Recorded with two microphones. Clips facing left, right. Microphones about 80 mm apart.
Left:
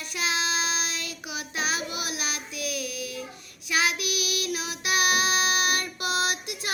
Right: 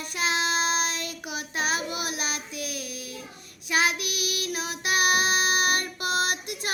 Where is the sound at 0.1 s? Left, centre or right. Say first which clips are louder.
Right 2 dB; right.